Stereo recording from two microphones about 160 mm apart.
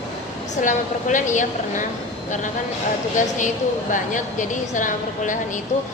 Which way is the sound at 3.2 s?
50° left (ahead or behind).